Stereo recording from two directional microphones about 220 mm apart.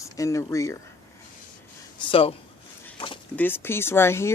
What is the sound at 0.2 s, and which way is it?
Speech, 15° left (ahead or behind).